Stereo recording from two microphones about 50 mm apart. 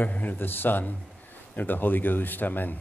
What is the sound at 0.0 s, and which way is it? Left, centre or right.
A man's voice, left.